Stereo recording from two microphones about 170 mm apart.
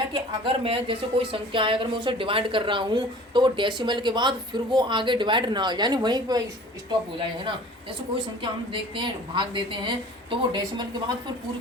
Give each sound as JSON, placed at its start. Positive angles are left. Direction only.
{"t": 0.6, "sound": "a woman's voice", "side_deg": -30}